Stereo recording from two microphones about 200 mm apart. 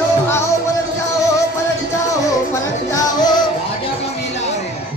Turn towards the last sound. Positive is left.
turn(degrees=20)  # may be behind; listen again after turning